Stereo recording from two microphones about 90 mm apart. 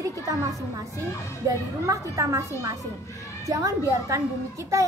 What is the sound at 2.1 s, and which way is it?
A woman's voice, 35° right (ahead or behind).